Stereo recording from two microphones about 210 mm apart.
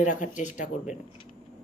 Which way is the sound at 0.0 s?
35° left (ahead or behind).